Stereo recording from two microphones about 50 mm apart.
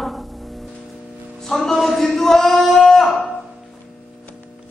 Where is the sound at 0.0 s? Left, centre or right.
Centre.